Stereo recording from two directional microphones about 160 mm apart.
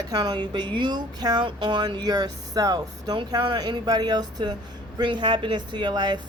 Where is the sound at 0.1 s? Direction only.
25° right (ahead or behind).